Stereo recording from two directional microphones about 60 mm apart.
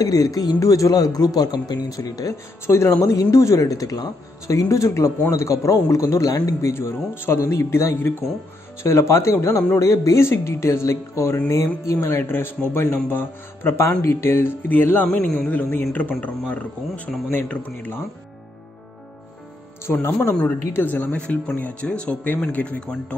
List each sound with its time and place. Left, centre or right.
0.0 s speech: left
2.6 s a man's voice: left
2.9 s speech: left
6.7 s a man's voice: left
12.1 s speech: left
19.9 s speech: left; by 23.1 s centre